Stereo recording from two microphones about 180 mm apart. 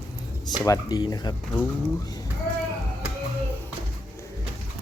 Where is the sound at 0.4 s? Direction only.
20° left (ahead or behind).